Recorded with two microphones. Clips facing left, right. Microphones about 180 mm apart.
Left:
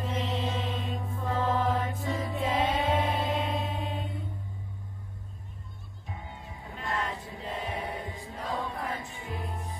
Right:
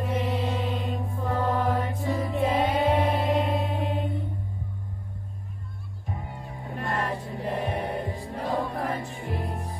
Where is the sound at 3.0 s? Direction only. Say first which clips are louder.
Right 5 dB; 60° right (ahead or behind).